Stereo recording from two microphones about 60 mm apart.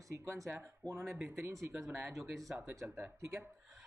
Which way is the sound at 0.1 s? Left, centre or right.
Right.